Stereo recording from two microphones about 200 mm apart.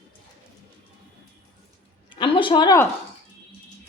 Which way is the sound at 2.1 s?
25° left (ahead or behind).